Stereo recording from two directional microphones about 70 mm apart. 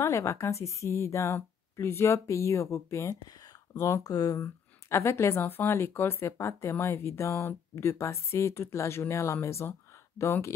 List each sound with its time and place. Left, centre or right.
0.0 s a woman's voice: left
3.7 s speech: left
4.4 s a woman's voice: left
5.4 s speech: left